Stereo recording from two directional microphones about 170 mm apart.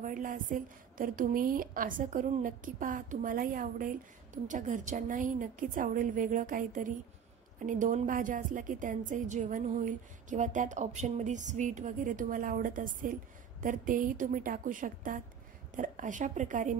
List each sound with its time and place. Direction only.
0.0 s a woman's voice: 50° right (ahead or behind)